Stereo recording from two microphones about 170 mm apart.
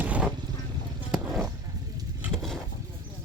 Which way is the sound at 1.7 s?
20° right (ahead or behind).